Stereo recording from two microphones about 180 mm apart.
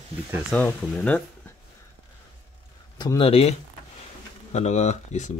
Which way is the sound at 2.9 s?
25° left (ahead or behind).